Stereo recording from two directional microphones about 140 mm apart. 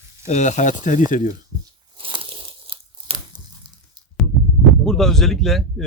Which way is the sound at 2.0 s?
40° right (ahead or behind).